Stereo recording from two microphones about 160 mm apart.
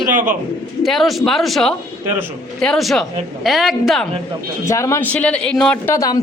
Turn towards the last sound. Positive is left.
turn(degrees=20)  # may be behind; listen again after turning